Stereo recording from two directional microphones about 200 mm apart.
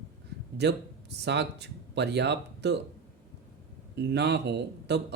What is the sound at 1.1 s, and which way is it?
Speech, 55° right (ahead or behind).